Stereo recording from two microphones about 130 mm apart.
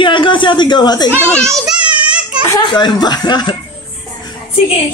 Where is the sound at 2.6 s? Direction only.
35° left (ahead or behind).